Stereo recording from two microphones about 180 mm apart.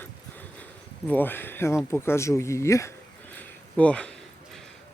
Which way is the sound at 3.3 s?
10° left (ahead or behind).